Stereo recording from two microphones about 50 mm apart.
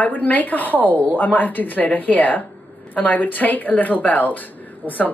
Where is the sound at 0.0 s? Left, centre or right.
Left.